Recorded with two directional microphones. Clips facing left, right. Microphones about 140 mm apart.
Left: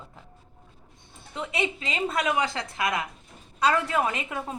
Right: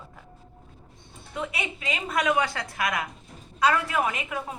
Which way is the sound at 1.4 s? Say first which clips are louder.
Left 3 dB; 25° left (ahead or behind).